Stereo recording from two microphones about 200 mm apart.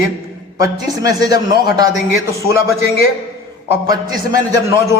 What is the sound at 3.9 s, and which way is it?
A man's voice, 20° right (ahead or behind).